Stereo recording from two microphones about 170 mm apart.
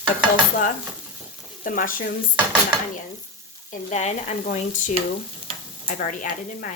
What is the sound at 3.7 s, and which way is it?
Speech, 45° left (ahead or behind).